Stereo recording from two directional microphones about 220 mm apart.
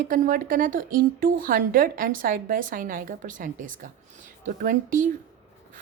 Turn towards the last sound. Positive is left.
turn(degrees=-35)  # may be behind; listen again after turning